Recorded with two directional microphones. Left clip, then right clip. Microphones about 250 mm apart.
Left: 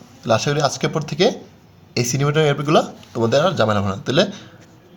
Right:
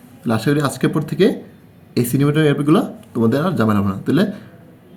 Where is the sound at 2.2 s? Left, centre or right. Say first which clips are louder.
Right 1 dB; left.